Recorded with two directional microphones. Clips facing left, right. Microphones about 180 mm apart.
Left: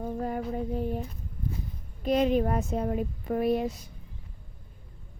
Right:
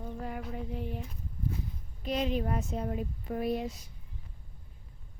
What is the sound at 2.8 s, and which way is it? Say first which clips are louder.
Speech: left 6 dB; 70° left (ahead or behind).